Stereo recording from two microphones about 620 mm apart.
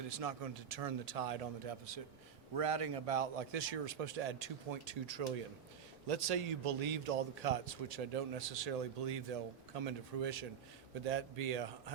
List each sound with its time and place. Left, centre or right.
0.0 s a man's voice: right
2.6 s a man's voice: right
11.0 s a man's voice: right